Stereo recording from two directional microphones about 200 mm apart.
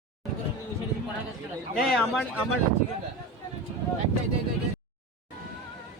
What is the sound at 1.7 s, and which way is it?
Speech, centre (ahead or behind).